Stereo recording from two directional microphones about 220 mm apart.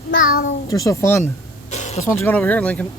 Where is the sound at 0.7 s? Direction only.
15° left (ahead or behind).